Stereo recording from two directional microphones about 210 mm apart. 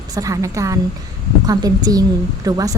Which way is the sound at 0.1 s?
15° right (ahead or behind).